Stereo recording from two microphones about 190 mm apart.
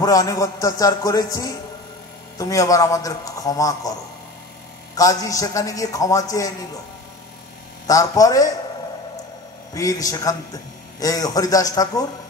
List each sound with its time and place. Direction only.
0.0 s a man's voice: 20° left (ahead or behind)
4.9 s a man's voice: 20° left (ahead or behind)
7.8 s a man's voice: 20° left (ahead or behind)
9.8 s a man's voice: 20° left (ahead or behind)